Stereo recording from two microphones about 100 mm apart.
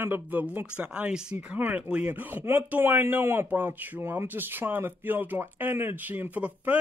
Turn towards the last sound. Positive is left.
turn(degrees=-15)  # may be behind; listen again after turning